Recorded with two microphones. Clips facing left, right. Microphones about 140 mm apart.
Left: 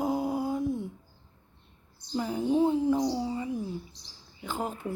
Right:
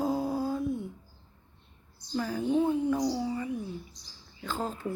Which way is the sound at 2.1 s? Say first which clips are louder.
Left 1 dB; 20° left (ahead or behind).